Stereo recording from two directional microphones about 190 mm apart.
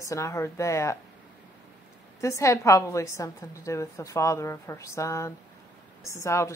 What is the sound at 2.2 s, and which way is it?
A woman's voice, 15° left (ahead or behind).